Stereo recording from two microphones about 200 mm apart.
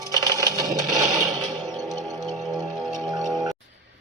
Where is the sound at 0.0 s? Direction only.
20° right (ahead or behind).